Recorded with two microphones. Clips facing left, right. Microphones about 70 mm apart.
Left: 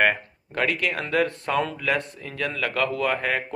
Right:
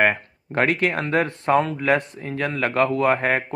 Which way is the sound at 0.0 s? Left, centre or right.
Right.